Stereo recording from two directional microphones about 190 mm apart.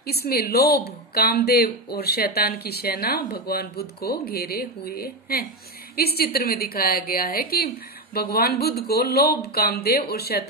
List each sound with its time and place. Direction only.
0.0 s speech: 55° left (ahead or behind)